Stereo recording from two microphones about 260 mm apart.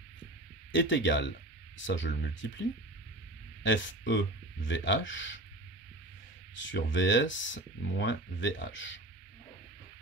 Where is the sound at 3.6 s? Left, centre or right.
Left.